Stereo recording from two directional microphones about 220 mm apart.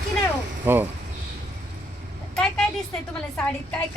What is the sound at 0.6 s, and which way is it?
Speech, 10° right (ahead or behind).